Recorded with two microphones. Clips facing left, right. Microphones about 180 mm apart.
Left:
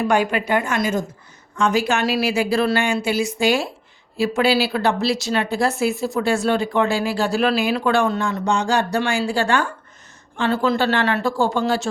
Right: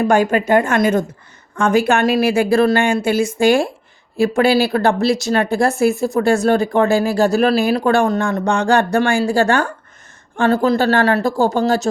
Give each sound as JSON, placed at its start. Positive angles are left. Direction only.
{"t": 0.0, "sound": "speech", "side_deg": -45}